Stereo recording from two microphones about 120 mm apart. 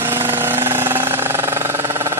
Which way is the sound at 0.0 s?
15° right (ahead or behind).